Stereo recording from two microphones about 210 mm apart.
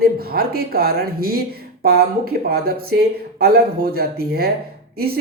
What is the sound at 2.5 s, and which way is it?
Speech, 50° right (ahead or behind).